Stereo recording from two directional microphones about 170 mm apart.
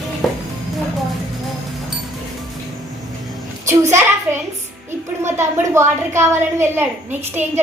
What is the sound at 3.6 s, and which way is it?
A woman's voice, 15° right (ahead or behind).